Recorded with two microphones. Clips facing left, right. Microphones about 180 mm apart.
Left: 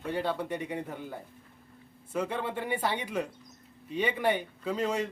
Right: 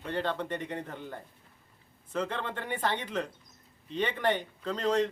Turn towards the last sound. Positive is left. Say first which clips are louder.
# right 2 dB
turn(degrees=10)  # may be behind; listen again after turning